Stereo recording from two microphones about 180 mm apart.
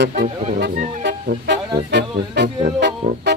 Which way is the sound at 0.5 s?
70° right (ahead or behind).